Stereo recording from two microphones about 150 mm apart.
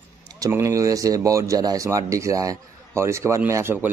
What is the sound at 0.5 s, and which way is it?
Speech, 20° right (ahead or behind).